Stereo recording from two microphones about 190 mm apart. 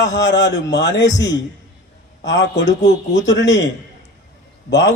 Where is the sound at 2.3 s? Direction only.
70° left (ahead or behind).